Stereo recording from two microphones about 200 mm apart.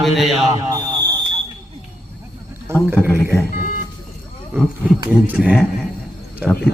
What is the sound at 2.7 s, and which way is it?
Speech, 10° right (ahead or behind).